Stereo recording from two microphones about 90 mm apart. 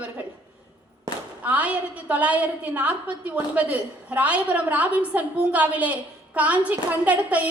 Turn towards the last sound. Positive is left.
turn(degrees=-15)  # may be behind; listen again after turning